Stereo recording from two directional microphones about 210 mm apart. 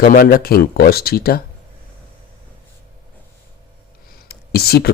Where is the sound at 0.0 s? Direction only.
40° left (ahead or behind).